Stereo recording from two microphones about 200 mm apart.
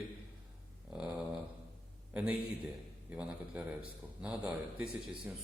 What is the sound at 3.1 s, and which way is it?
Mantra, 5° right (ahead or behind).